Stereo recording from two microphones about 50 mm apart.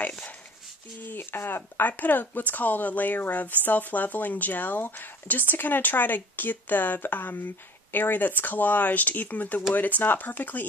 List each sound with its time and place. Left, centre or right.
1.0 s speech: left